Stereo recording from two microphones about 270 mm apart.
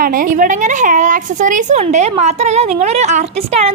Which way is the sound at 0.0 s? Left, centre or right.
Right.